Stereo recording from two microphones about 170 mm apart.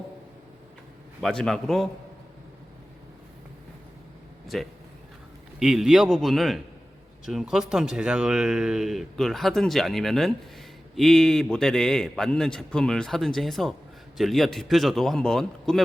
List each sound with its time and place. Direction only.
1.2 s speech: 5° left (ahead or behind)
4.5 s speech: centre (ahead or behind)